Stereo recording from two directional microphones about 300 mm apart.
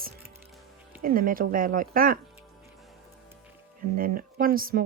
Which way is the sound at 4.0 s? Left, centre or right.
Right.